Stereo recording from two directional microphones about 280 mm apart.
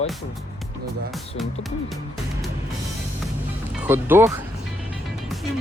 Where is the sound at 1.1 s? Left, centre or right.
Centre.